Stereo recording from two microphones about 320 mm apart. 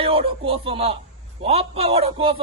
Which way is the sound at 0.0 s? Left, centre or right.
Centre.